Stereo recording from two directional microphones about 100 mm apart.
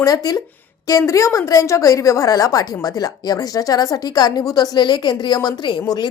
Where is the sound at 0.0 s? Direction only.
40° left (ahead or behind).